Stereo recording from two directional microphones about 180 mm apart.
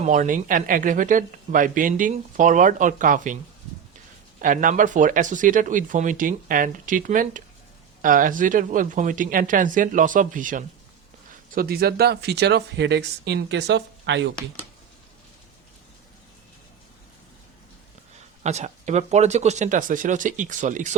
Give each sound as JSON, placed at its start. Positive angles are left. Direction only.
{"t": 0.0, "sound": "speech", "side_deg": -45}
{"t": 4.4, "sound": "speech", "side_deg": -50}
{"t": 18.4, "sound": "speech", "side_deg": -40}